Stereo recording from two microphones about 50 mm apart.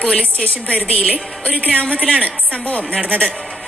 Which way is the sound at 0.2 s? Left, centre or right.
Left.